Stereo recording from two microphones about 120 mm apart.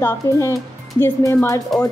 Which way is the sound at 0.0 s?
25° left (ahead or behind).